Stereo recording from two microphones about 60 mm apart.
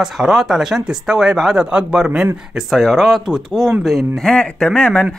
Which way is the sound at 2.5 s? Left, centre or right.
Centre.